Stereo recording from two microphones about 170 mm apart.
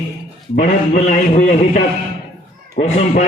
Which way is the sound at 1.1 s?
50° left (ahead or behind).